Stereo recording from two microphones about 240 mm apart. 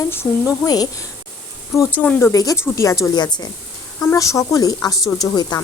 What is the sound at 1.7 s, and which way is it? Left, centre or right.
Speech, centre.